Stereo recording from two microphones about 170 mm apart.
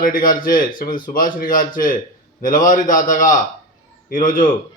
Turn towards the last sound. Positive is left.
turn(degrees=55)  # may be behind; listen again after turning